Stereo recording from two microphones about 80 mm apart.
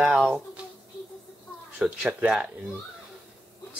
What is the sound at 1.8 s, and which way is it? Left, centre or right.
Speech, centre.